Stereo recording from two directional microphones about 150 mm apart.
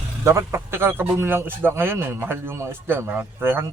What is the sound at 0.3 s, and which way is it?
Speech, 20° right (ahead or behind).